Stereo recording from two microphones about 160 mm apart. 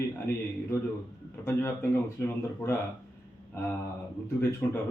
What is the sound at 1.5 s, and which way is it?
Speech, 15° left (ahead or behind).